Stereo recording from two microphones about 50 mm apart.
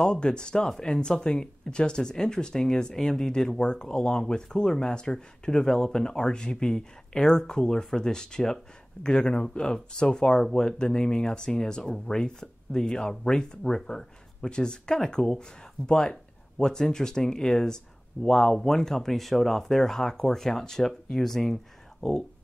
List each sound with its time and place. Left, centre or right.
0.0 s speech: centre